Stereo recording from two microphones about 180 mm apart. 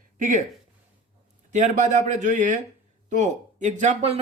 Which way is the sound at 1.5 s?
45° right (ahead or behind).